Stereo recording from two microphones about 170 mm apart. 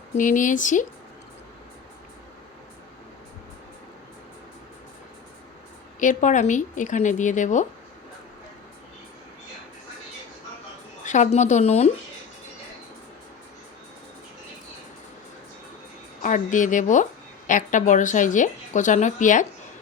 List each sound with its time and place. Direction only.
0.2 s a woman's voice: 50° left (ahead or behind)
6.0 s a woman's voice: 45° left (ahead or behind)
11.0 s a woman's voice: 45° left (ahead or behind)
16.2 s a woman's voice: 50° left (ahead or behind)